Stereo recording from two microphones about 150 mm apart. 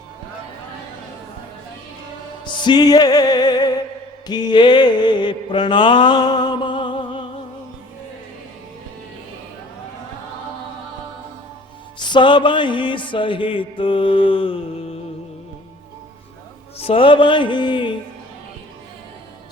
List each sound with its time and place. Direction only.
2.4 s music: 30° left (ahead or behind)
11.9 s music: 30° left (ahead or behind)
16.8 s music: 35° left (ahead or behind)